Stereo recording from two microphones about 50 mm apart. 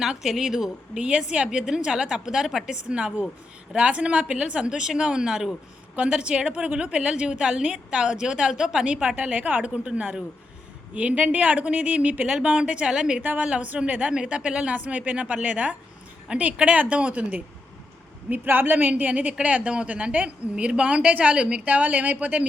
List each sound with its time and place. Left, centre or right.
0.0 s a woman's voice: centre
0.9 s a woman's voice: right
2.9 s a woman's voice: right
14.8 s a woman's voice: right
18.4 s a woman's voice: right